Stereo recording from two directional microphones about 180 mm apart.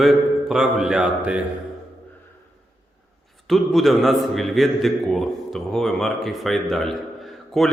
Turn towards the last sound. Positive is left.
turn(degrees=0)  # may be behind; listen again after turning